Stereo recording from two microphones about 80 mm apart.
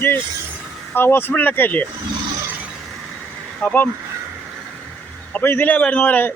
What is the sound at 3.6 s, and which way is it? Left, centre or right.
Speech, centre.